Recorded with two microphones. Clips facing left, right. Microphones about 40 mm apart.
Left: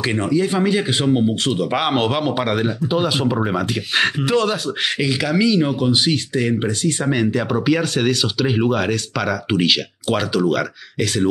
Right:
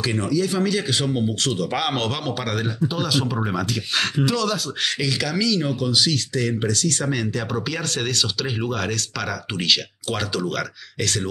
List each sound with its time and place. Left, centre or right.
0.0 s speech: left
5.0 s speech: left